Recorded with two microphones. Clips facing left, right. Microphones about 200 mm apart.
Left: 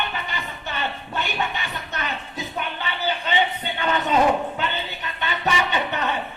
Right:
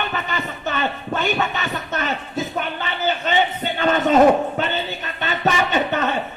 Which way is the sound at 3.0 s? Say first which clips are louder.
Right 3 dB; 45° right (ahead or behind).